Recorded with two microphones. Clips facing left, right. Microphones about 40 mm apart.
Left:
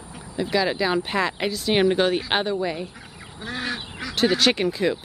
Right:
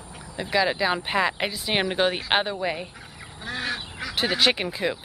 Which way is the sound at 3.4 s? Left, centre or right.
Centre.